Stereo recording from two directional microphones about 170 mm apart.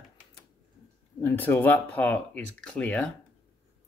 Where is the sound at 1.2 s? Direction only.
10° left (ahead or behind).